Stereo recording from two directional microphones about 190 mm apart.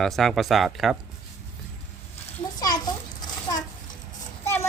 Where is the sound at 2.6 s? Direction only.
20° left (ahead or behind).